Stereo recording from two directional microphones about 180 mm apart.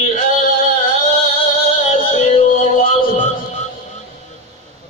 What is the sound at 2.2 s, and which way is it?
Music, 35° left (ahead or behind).